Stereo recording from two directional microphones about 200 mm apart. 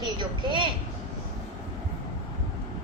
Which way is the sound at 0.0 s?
25° right (ahead or behind).